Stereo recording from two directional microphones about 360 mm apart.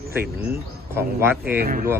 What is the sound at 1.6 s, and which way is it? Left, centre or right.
Speech, right.